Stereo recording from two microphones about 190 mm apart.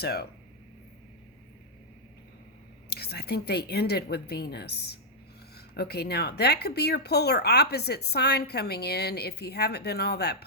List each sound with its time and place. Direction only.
0.0 s speech: 55° left (ahead or behind)
2.9 s speech: 55° left (ahead or behind)